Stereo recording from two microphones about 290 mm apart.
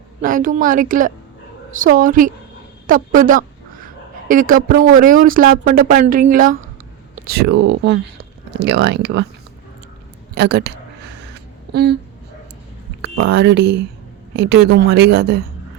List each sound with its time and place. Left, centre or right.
0.2 s speech: right
10.3 s speech: right
11.7 s speech: right
13.0 s speech: right